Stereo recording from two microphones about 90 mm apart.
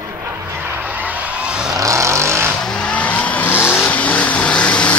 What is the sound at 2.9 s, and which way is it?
Vehicle, 15° left (ahead or behind).